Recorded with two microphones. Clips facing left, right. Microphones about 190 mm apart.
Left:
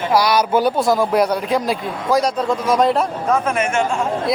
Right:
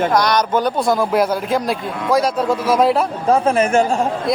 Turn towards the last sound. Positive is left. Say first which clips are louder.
# right 1 dB
turn(degrees=0)  # may be behind; listen again after turning